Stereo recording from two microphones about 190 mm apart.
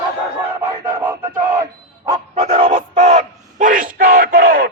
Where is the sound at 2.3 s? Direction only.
30° right (ahead or behind); by 4.7 s 50° right (ahead or behind).